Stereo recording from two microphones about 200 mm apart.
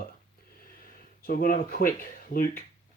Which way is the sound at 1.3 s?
45° left (ahead or behind).